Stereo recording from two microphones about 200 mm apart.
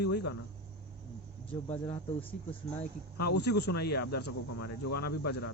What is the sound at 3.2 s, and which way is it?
Speech, 55° left (ahead or behind).